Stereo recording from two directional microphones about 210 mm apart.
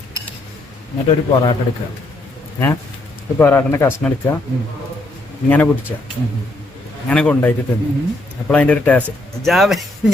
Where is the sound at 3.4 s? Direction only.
10° left (ahead or behind).